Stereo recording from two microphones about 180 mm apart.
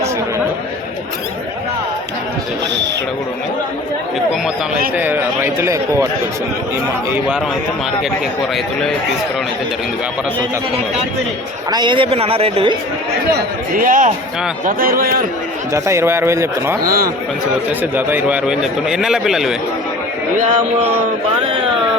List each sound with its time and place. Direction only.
4.9 s speech: 10° right (ahead or behind)
7.1 s speech: 5° right (ahead or behind)
11.7 s a man's voice: 25° right (ahead or behind)
13.3 s a man's voice: 50° right (ahead or behind)
15.7 s speech: 15° right (ahead or behind)
20.3 s a man's voice: 45° right (ahead or behind)